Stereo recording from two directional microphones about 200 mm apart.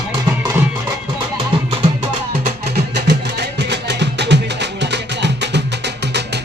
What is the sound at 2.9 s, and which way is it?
Music, 60° right (ahead or behind).